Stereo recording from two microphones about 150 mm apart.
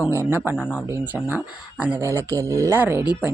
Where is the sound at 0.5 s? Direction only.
5° right (ahead or behind).